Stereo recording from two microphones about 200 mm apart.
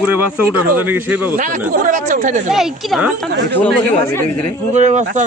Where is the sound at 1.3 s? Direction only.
40° right (ahead or behind).